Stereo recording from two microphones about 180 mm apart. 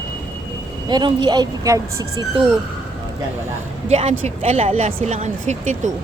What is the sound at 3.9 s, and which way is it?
Speech, 35° right (ahead or behind).